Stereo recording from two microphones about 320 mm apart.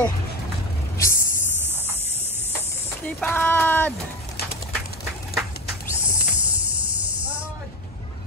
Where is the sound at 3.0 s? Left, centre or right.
Centre.